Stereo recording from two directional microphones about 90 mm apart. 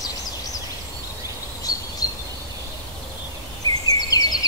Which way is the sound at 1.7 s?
45° left (ahead or behind).